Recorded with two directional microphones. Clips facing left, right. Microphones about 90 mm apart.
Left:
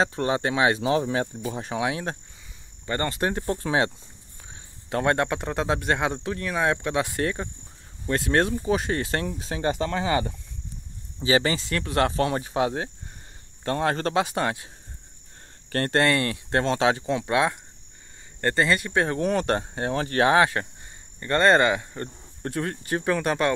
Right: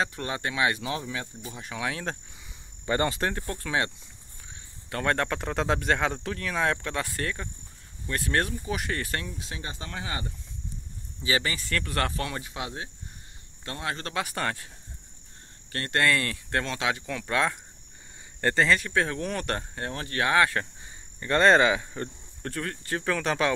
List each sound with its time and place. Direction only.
0.0 s speech: 25° left (ahead or behind)
1.0 s speech: 40° left (ahead or behind)
1.8 s speech: 20° left (ahead or behind)
2.9 s speech: 10° right (ahead or behind)
3.3 s speech: 25° left (ahead or behind)
9.4 s speech: 35° left (ahead or behind)
9.7 s speech: 85° left
11.1 s speech: 30° left (ahead or behind)
14.1 s speech: 20° left (ahead or behind)
15.9 s speech: 25° left (ahead or behind)
18.4 s speech: 5° left (ahead or behind); by 20.6 s 20° left (ahead or behind)
21.2 s speech: centre (ahead or behind)
22.4 s speech: 20° left (ahead or behind)
23.0 s speech: 5° left (ahead or behind)